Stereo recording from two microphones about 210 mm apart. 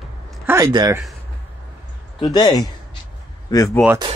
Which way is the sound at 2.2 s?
20° left (ahead or behind).